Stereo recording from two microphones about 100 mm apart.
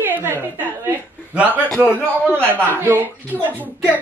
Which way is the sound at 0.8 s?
15° right (ahead or behind).